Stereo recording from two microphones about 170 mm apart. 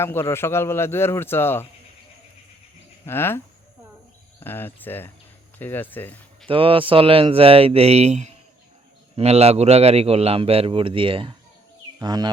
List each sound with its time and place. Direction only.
0.0 s a man's voice: 15° left (ahead or behind)
3.1 s a man's voice: 15° left (ahead or behind)
6.5 s a man's voice: 30° right (ahead or behind)
11.9 s music: 25° right (ahead or behind)